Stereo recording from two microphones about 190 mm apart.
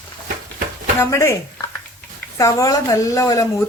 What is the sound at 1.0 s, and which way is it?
Speech, 15° left (ahead or behind).